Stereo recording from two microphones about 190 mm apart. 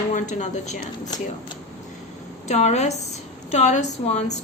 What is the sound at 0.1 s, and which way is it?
A woman's voice, 40° left (ahead or behind).